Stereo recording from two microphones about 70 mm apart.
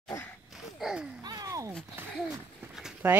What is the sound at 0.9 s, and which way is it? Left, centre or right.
Speech, centre.